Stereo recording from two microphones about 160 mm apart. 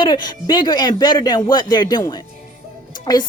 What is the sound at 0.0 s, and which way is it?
Speech, 25° left (ahead or behind).